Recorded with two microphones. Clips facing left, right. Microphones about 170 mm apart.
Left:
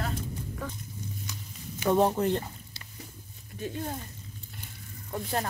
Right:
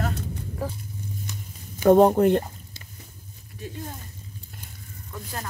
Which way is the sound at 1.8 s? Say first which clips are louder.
Right 8 dB; 50° right (ahead or behind).